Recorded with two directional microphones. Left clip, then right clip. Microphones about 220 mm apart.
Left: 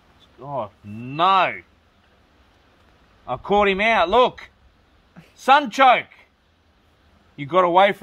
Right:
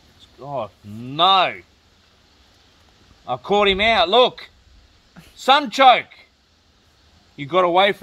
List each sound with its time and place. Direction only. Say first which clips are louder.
0.4 s speech: right 1 dB; 15° left (ahead or behind)
3.3 s speech: right 1 dB; 15° left (ahead or behind)
7.3 s speech: even; 20° left (ahead or behind)